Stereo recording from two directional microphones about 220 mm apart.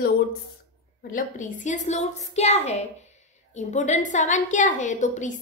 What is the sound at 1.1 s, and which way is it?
A woman's voice, 35° left (ahead or behind).